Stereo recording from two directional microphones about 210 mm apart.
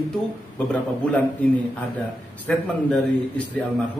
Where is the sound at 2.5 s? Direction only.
5° left (ahead or behind).